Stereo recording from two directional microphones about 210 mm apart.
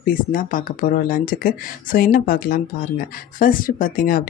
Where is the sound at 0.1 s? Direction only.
40° left (ahead or behind).